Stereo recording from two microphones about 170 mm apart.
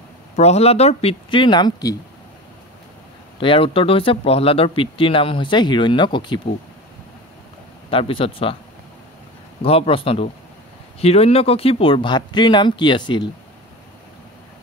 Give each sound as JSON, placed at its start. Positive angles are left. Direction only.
{"t": 0.4, "sound": "speech", "side_deg": 40}
{"t": 3.3, "sound": "speech", "side_deg": 30}
{"t": 7.9, "sound": "speech", "side_deg": 30}
{"t": 9.6, "sound": "speech", "side_deg": 35}